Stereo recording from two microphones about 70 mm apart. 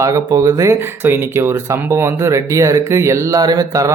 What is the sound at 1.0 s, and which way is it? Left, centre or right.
Speech, right.